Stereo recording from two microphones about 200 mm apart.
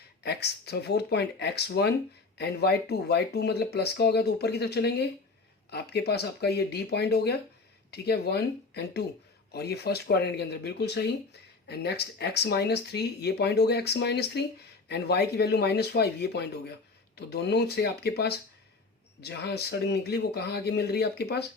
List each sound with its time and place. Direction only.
0.2 s speech: 55° left (ahead or behind)